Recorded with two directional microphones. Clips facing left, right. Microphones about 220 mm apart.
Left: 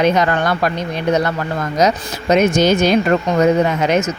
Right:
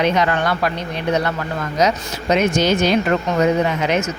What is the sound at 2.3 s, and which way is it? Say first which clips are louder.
Speech: left 4 dB; 45° left (ahead or behind).